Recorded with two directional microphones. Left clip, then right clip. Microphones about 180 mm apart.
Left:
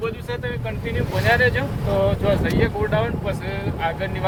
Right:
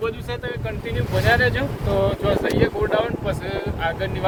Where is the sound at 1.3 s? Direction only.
15° right (ahead or behind).